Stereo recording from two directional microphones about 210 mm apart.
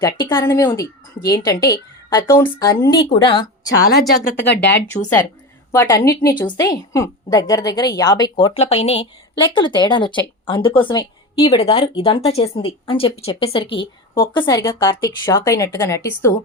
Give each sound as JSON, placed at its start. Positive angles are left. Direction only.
{"t": 0.0, "sound": "speech", "side_deg": 15}
{"t": 3.8, "sound": "a woman's voice", "side_deg": 45}
{"t": 4.9, "sound": "a woman's voice", "side_deg": 10}